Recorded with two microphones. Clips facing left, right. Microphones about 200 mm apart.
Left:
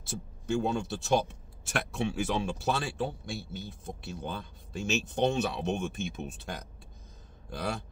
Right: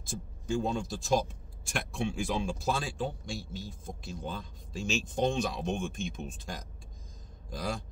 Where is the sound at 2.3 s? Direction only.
65° left (ahead or behind).